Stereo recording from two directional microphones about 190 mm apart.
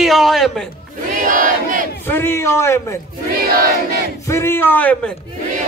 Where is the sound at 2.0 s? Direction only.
10° left (ahead or behind).